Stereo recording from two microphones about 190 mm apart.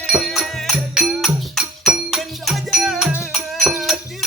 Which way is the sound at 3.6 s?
Centre (ahead or behind).